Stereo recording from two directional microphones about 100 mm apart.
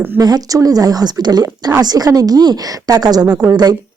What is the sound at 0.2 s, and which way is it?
A woman's voice, 40° right (ahead or behind).